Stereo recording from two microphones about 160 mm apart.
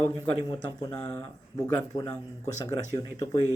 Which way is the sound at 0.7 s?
25° left (ahead or behind).